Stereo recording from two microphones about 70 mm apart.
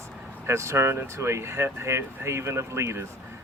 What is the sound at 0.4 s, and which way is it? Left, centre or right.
Speech, right.